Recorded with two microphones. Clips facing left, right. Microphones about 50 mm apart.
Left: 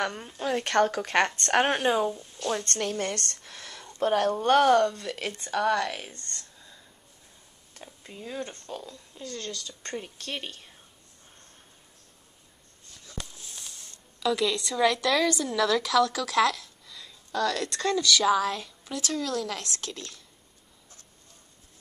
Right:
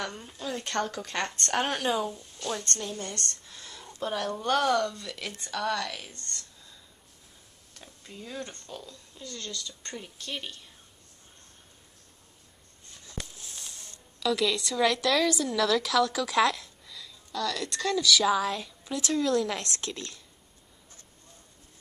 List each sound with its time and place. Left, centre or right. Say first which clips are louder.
0.0 s speech: left 5 dB; left
1.9 s a woman's voice: left 4 dB; centre
2.8 s a woman's voice: left 6 dB; left
4.0 s speech: left 7 dB; left
7.8 s a woman's voice: left 3 dB; centre
13.4 s a sound: even; centre
15.4 s a woman's voice: left 1 dB; centre
17.3 s speech: left 4 dB; left
18.0 s a woman's voice: left 1 dB; centre